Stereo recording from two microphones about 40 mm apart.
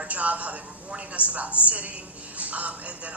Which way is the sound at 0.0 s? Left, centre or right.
Right.